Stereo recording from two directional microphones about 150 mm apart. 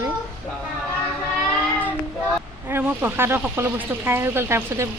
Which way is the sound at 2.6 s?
15° right (ahead or behind).